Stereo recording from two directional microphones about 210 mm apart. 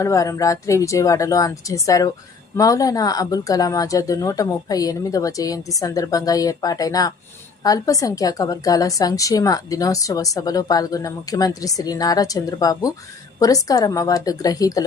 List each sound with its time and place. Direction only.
0.0 s a woman's voice: 15° left (ahead or behind)